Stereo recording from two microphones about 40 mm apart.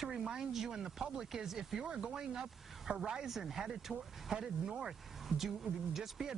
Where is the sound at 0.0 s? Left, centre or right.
Centre.